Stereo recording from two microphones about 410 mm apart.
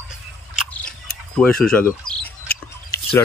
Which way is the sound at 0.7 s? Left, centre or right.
Centre.